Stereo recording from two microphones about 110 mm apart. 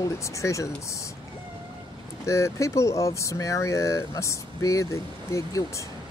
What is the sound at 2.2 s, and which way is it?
Speech, 25° left (ahead or behind).